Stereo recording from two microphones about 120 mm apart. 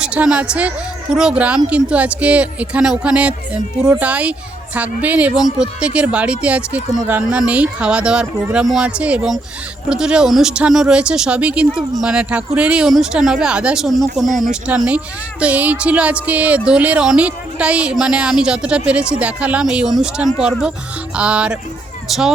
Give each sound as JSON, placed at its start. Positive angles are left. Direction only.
{"t": 0.0, "sound": "speech", "side_deg": -10}